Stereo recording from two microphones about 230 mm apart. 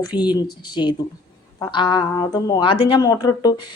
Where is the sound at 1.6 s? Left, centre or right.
Centre.